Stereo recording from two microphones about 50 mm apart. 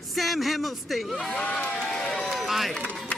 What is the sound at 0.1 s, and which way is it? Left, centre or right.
Speech, centre.